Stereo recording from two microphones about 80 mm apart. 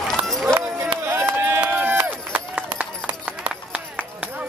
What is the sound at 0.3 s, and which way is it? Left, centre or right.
Run, centre.